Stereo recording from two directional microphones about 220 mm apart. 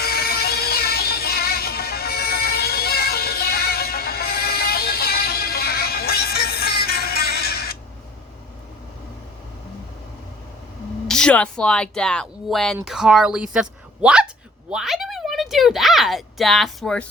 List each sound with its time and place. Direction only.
0.0 s music: 45° left (ahead or behind)
11.1 s speech: 5° left (ahead or behind)